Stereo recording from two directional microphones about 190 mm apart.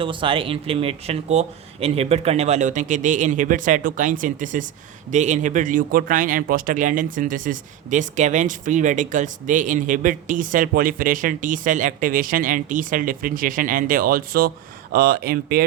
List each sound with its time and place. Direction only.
0.0 s speech: 25° right (ahead or behind); by 15.6 s 55° right (ahead or behind)